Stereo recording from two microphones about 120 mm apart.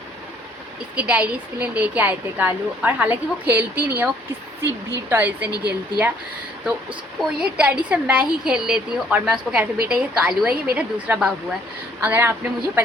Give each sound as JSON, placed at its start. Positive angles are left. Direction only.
{"t": 0.9, "sound": "a woman's voice", "side_deg": -10}
{"t": 7.2, "sound": "a woman's voice", "side_deg": -5}